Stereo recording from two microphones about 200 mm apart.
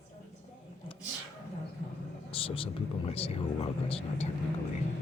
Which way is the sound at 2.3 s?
25° left (ahead or behind).